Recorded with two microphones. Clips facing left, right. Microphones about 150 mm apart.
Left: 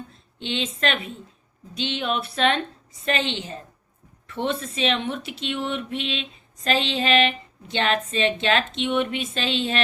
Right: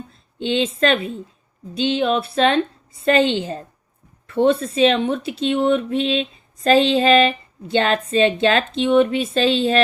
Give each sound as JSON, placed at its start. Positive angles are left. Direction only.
{"t": 0.4, "sound": "speech", "side_deg": -35}